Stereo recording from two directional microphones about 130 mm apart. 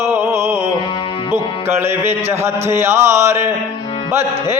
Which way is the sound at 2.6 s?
20° right (ahead or behind).